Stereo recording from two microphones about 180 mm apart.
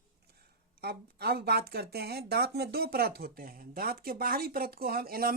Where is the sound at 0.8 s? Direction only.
60° right (ahead or behind).